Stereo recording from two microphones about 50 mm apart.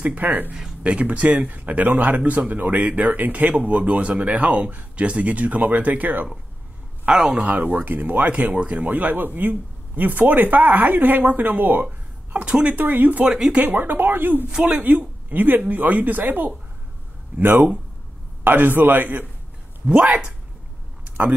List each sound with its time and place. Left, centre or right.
0.0 s a man's voice: right
0.5 s a man's voice: centre; by 6.2 s right
7.1 s speech: centre
7.4 s a man's voice: right
8.8 s a man's voice: right
12.4 s speech: right
12.7 s a man's voice: right
14.5 s a man's voice: centre
14.8 s a man's voice: right